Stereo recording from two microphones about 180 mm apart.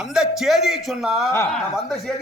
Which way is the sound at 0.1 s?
5° right (ahead or behind).